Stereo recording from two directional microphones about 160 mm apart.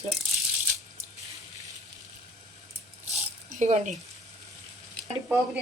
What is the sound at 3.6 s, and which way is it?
Speech, 50° right (ahead or behind).